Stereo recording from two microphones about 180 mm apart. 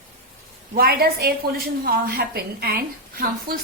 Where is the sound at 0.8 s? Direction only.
55° right (ahead or behind).